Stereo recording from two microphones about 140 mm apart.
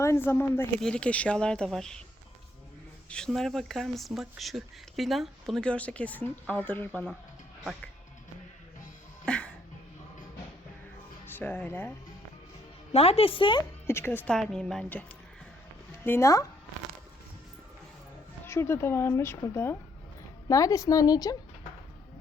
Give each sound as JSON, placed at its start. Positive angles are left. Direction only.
{"t": 0.0, "sound": "speech", "side_deg": 20}
{"t": 0.8, "sound": "speech", "side_deg": 5}
{"t": 3.1, "sound": "speech", "side_deg": 5}
{"t": 9.2, "sound": "music", "side_deg": 5}
{"t": 11.3, "sound": "speech", "side_deg": 15}
{"t": 12.9, "sound": "speech", "side_deg": 45}
{"t": 13.8, "sound": "speech", "side_deg": 15}
{"t": 14.3, "sound": "speech", "side_deg": 5}
{"t": 16.0, "sound": "speech", "side_deg": 20}
{"t": 18.4, "sound": "speech", "side_deg": 20}